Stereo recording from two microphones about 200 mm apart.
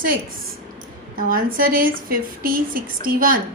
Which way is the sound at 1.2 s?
45° right (ahead or behind).